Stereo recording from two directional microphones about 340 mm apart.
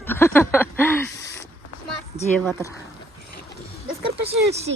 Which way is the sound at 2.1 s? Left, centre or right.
Centre.